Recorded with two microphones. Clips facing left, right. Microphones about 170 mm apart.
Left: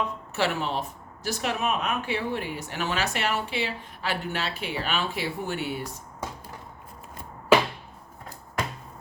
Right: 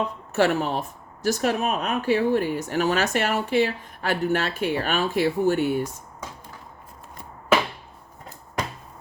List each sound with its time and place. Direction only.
0.3 s speech: 45° right (ahead or behind)